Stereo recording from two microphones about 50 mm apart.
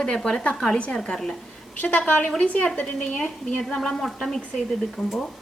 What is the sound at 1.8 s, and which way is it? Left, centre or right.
A woman's voice, left.